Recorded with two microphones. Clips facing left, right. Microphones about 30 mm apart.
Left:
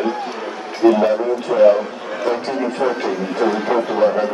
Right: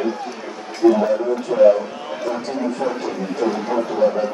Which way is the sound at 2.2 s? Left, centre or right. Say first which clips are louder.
Left 3 dB; left.